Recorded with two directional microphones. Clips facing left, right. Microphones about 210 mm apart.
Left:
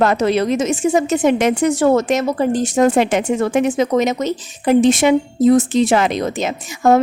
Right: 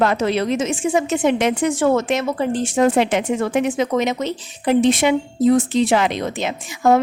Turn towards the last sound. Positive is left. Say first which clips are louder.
# left 2 dB
turn(degrees=45)  # may be behind; listen again after turning